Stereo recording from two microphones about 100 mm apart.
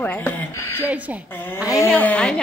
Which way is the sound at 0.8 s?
15° right (ahead or behind).